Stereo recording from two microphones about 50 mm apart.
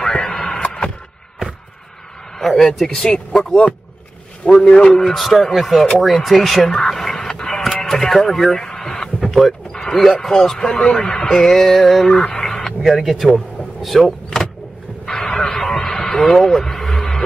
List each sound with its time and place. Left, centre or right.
0.0 s radio: centre
2.3 s speech: centre
2.9 s speech: centre
4.6 s a man's voice: left
4.9 s speech: centre
6.9 s vehicle: centre
9.4 s speech: centre
12.2 s radio: centre
12.8 s speech: centre
13.7 s vehicle: centre
15.0 s radio: centre